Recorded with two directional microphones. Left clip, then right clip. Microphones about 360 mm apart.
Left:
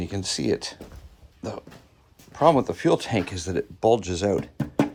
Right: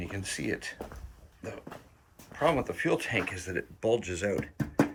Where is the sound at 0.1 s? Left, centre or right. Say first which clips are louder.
Left 9 dB; centre.